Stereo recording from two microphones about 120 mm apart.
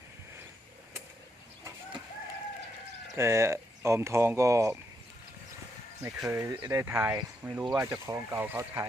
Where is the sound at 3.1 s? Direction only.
25° right (ahead or behind).